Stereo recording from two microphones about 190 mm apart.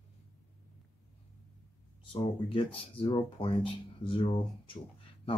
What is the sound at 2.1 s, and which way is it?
Speech, 25° left (ahead or behind).